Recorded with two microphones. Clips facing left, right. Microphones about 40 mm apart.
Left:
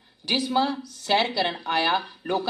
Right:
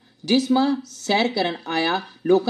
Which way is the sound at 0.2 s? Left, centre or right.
Left.